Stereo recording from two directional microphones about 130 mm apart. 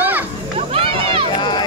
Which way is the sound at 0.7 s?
45° right (ahead or behind).